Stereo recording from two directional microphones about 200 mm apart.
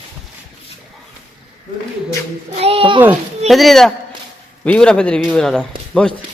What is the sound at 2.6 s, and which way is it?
Speech, 30° right (ahead or behind).